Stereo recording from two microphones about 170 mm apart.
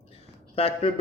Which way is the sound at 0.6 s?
35° left (ahead or behind).